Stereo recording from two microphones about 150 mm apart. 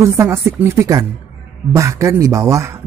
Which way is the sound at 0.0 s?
20° right (ahead or behind).